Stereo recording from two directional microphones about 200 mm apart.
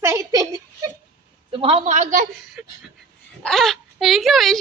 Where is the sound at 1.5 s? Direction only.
25° right (ahead or behind).